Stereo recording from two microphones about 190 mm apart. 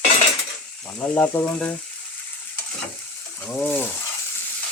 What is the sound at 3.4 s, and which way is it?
Frying, 10° left (ahead or behind).